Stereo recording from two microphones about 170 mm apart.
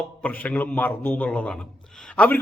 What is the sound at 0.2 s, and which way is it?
A man's voice, 10° left (ahead or behind).